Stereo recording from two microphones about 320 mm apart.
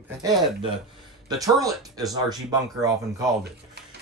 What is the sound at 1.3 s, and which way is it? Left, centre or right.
Speech, centre.